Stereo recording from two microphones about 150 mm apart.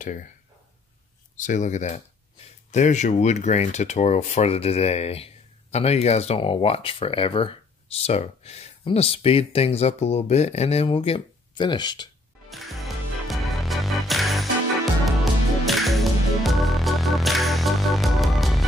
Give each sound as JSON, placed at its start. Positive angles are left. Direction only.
{"t": 0.0, "sound": "speech", "side_deg": 60}
{"t": 1.3, "sound": "speech", "side_deg": 55}
{"t": 12.4, "sound": "music", "side_deg": 0}
{"t": 15.6, "sound": "music", "side_deg": 0}